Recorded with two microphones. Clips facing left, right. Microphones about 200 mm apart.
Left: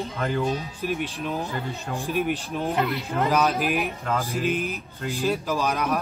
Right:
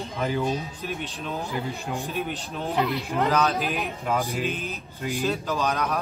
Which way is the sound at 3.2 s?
10° left (ahead or behind).